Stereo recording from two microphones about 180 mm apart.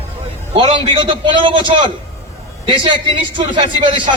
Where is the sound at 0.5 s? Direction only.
25° right (ahead or behind).